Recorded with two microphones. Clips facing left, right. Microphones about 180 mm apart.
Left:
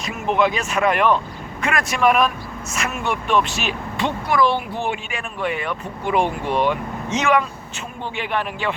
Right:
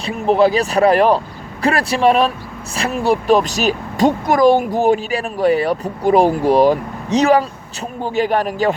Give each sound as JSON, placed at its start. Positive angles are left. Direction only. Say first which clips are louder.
{"t": 0.0, "sound": "speech", "louder": "right 6 dB", "side_deg": -35}